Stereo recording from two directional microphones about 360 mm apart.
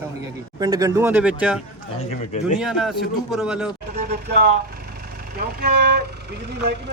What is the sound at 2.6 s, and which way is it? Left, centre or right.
Speech, centre.